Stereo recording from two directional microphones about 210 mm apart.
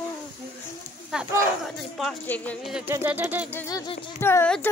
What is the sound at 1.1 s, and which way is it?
Speech, centre (ahead or behind).